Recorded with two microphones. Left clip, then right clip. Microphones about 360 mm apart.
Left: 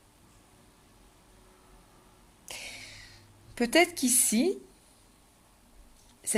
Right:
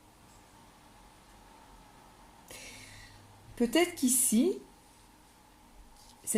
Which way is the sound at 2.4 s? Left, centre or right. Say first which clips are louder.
Left 7 dB; left.